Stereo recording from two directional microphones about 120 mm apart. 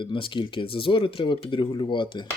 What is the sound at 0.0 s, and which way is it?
Speech, 45° left (ahead or behind).